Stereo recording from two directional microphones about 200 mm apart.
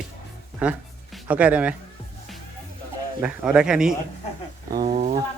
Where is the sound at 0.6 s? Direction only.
5° right (ahead or behind).